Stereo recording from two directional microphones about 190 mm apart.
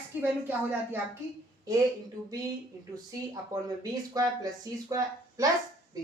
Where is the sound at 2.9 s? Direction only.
20° right (ahead or behind).